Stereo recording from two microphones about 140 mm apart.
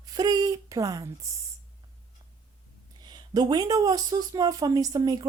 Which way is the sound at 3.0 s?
30° right (ahead or behind).